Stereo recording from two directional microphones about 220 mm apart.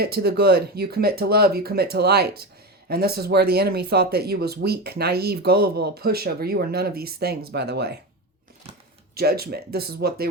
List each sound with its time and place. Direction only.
0.0 s speech: 45° right (ahead or behind)
9.1 s speech: 45° right (ahead or behind)